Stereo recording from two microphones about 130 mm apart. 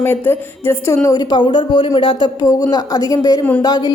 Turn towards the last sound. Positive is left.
turn(degrees=30)  # may be behind; listen again after turning